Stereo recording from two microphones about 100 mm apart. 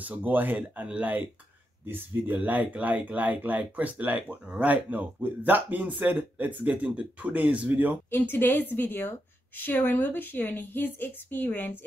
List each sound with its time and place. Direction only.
0.0 s speech: 15° right (ahead or behind)
2.3 s speech: 15° right (ahead or behind)
8.1 s speech: 20° left (ahead or behind)